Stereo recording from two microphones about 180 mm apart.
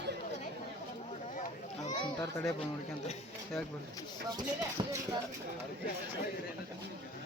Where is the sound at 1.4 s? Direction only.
40° left (ahead or behind).